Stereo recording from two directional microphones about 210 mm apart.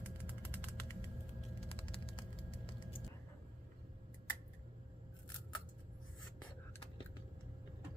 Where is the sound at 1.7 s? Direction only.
25° left (ahead or behind).